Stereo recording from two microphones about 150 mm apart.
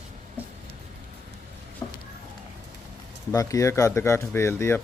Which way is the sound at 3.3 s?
20° left (ahead or behind).